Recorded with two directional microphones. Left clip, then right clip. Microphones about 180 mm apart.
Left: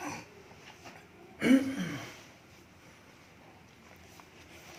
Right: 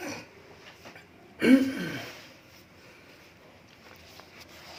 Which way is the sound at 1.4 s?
40° right (ahead or behind).